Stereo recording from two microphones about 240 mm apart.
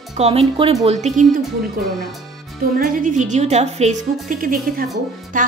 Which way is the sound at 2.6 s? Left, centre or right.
Right.